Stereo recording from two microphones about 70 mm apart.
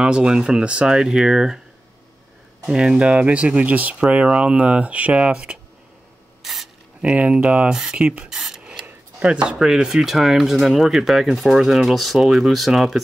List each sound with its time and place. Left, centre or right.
0.0 s speech: centre
2.7 s speech: centre
6.4 s a sound: centre
7.0 s speech: centre
8.4 s rub: centre
9.2 s speech: centre